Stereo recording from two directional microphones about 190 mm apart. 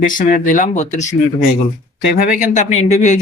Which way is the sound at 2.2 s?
45° left (ahead or behind).